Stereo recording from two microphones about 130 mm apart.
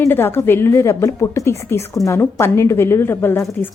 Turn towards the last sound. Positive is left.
turn(degrees=15)  # may be behind; listen again after turning